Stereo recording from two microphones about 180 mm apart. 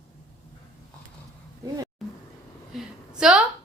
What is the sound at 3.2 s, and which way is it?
Speech, 5° right (ahead or behind).